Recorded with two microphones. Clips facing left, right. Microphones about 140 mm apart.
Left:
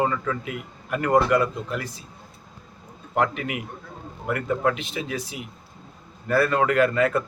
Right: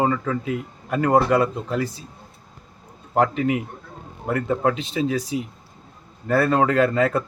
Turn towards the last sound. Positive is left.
turn(degrees=-30)  # may be behind; listen again after turning